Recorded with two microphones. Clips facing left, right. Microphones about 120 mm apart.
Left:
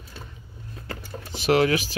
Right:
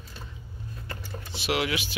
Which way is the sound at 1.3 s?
45° left (ahead or behind).